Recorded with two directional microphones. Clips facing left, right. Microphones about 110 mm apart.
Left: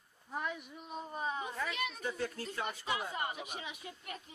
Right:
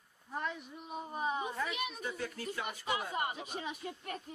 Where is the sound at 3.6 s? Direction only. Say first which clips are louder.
Right 5 dB; 40° right (ahead or behind).